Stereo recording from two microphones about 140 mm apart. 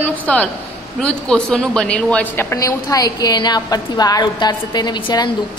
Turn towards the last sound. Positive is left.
turn(degrees=35)  # may be behind; listen again after turning